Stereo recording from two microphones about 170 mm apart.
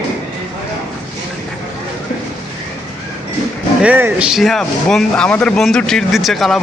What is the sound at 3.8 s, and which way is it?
Speech, 10° right (ahead or behind).